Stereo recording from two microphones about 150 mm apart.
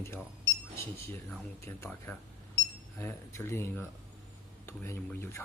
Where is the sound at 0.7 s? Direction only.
20° left (ahead or behind).